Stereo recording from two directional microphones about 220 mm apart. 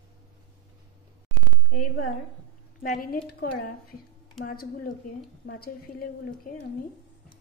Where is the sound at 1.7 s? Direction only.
40° left (ahead or behind).